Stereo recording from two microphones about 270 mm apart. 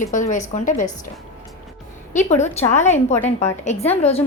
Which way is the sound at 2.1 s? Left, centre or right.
Left.